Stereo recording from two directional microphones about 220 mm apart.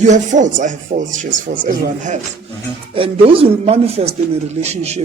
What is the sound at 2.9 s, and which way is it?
Speech, 25° right (ahead or behind).